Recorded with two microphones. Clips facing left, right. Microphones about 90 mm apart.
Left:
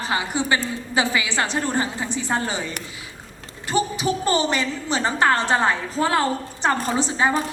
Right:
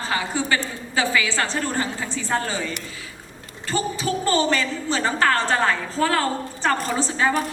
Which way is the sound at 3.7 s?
20° left (ahead or behind).